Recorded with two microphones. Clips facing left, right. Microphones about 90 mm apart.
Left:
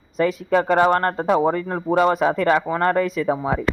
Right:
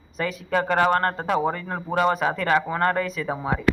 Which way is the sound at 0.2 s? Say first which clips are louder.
Left 6 dB; 25° left (ahead or behind).